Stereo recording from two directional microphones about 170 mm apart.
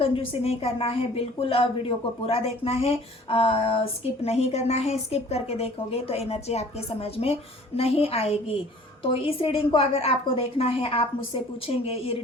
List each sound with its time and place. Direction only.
0.0 s a woman's voice: 35° left (ahead or behind)